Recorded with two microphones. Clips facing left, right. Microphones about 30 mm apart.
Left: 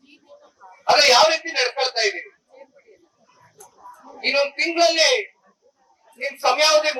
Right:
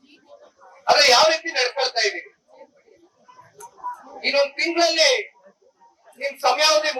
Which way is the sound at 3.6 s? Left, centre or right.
Right.